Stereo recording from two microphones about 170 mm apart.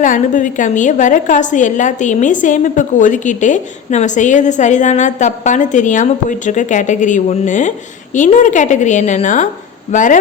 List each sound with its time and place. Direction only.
0.0 s a woman's voice: 50° left (ahead or behind)